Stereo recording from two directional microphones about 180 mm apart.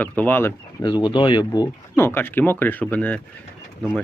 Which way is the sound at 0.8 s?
25° left (ahead or behind).